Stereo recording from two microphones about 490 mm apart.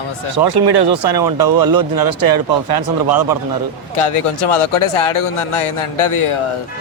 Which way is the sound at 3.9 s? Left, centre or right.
Left.